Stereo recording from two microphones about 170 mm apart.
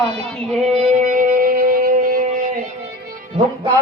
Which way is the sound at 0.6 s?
45° right (ahead or behind).